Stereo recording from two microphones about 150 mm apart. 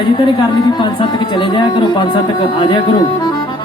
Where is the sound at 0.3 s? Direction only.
30° left (ahead or behind).